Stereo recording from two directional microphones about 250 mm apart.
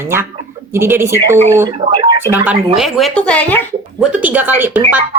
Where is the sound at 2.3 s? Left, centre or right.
Centre.